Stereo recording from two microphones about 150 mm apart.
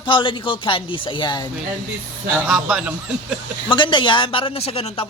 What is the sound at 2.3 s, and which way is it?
Speech, centre (ahead or behind).